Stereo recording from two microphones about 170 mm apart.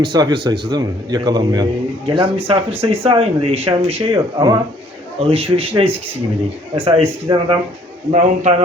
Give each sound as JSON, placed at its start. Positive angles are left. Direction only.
{"t": 0.0, "sound": "a man's voice", "side_deg": -25}
{"t": 8.1, "sound": "a man's voice", "side_deg": -45}